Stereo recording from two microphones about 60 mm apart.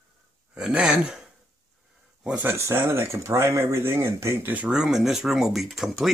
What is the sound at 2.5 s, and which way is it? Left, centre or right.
Speech, right.